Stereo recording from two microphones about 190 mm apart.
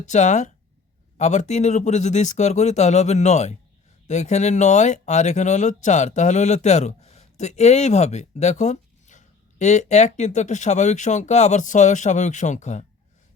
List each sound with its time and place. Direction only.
0.0 s speech: 40° left (ahead or behind)